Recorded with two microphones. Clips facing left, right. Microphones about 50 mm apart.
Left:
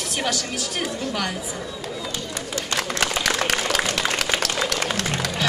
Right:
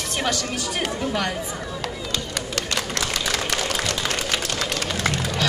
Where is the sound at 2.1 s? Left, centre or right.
Right.